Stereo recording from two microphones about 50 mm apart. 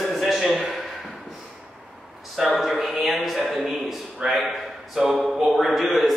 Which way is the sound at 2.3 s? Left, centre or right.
Centre.